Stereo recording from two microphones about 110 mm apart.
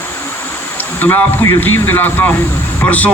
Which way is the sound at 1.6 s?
15° left (ahead or behind).